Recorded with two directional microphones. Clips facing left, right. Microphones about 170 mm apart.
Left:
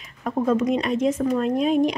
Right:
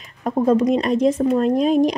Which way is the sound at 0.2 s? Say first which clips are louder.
Right 4 dB; 35° right (ahead or behind).